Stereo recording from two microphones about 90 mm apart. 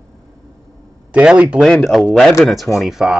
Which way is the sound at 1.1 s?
15° right (ahead or behind).